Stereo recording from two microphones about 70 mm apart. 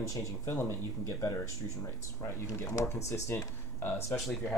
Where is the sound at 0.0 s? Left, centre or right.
Left.